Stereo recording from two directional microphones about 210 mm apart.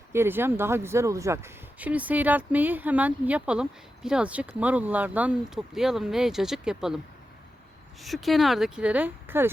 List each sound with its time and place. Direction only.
0.1 s speech: 10° right (ahead or behind)
8.0 s speech: centre (ahead or behind)